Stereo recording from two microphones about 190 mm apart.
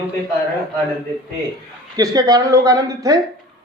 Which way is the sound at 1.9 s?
20° right (ahead or behind).